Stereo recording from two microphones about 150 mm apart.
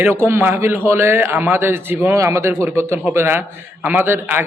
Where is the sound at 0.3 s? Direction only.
15° right (ahead or behind).